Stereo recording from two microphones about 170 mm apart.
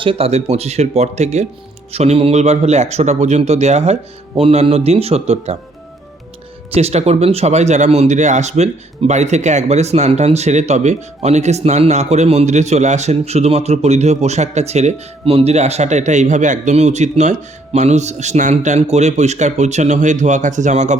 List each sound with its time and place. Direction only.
0.0 s speech: 35° right (ahead or behind)
6.7 s a man's voice: 35° right (ahead or behind)